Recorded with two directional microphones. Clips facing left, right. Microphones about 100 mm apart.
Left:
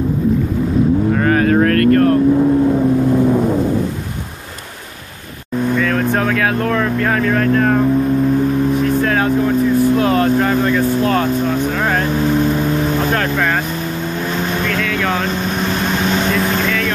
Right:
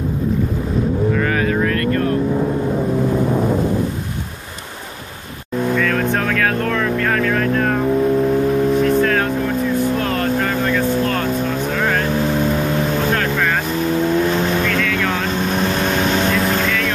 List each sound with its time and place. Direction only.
1.1 s vehicle: 40° left (ahead or behind)
5.8 s vehicle: 10° left (ahead or behind)
10.0 s motorboat: 10° left (ahead or behind)